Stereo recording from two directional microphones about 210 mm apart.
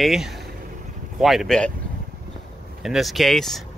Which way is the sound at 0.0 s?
Centre (ahead or behind).